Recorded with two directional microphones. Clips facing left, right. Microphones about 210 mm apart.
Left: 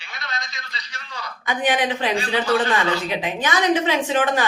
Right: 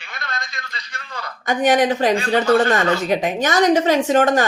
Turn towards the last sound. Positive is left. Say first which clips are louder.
# right 5 dB
turn(degrees=-45)  # may be behind; listen again after turning